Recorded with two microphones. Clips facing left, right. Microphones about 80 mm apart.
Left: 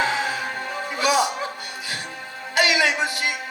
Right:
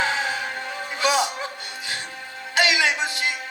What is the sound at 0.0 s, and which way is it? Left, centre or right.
Music, right.